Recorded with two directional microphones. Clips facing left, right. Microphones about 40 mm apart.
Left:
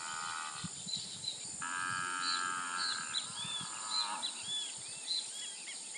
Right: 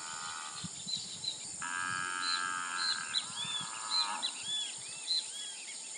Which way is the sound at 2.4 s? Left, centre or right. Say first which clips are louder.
Right 1 dB; centre.